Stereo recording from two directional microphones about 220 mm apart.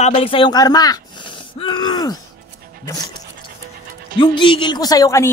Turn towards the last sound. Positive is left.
turn(degrees=15)  # may be behind; listen again after turning